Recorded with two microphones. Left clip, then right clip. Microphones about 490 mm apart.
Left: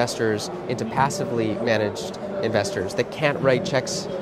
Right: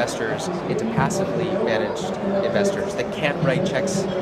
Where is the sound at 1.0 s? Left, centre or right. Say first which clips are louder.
Left 3 dB; left.